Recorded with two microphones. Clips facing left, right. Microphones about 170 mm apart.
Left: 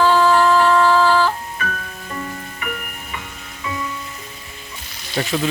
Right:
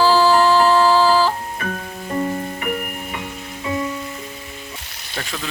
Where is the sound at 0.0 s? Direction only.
30° right (ahead or behind).